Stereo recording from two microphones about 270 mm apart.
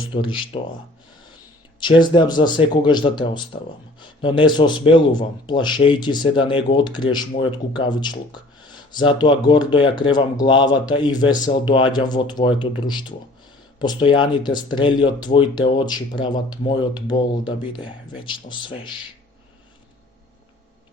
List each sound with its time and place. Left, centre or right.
0.1 s speech: centre
1.8 s speech: centre
17.1 s speech: left
17.7 s speech: centre